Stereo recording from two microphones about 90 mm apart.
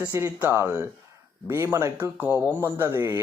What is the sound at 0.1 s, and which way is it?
Speech, 20° right (ahead or behind).